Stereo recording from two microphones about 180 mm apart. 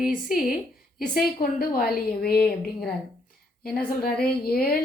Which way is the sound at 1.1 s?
55° left (ahead or behind).